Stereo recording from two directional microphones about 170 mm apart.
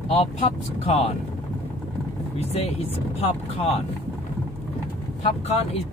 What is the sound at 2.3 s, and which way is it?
Speech, 40° left (ahead or behind).